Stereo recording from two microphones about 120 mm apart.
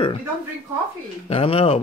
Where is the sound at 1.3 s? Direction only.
50° left (ahead or behind).